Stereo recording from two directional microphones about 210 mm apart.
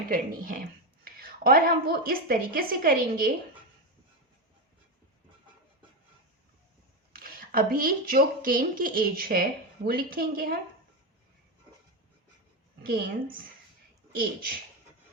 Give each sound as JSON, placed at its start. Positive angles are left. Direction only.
{"t": 0.1, "sound": "speech", "side_deg": -40}
{"t": 7.1, "sound": "speech", "side_deg": -45}
{"t": 12.9, "sound": "speech", "side_deg": -45}